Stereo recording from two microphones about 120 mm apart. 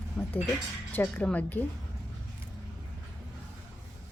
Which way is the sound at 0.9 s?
15° left (ahead or behind).